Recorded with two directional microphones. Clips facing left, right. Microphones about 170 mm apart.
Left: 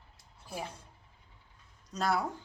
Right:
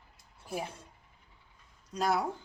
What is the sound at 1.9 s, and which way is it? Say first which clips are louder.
Speech: right 1 dB; 15° right (ahead or behind).